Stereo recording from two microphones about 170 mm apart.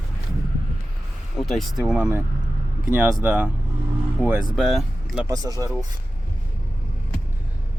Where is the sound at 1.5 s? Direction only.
Centre (ahead or behind).